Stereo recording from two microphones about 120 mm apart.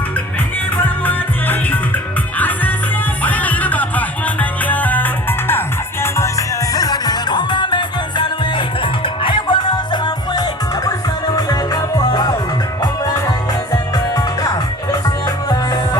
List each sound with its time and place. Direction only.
1.0 s music: 15° left (ahead or behind)
3.2 s music: 15° left (ahead or behind); by 12.3 s 35° left (ahead or behind)
13.9 s music: 30° left (ahead or behind)